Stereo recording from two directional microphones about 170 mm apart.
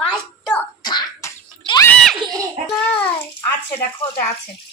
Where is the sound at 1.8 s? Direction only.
5° left (ahead or behind).